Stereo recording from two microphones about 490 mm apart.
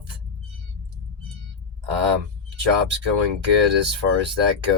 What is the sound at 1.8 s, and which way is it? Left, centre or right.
Speech, right.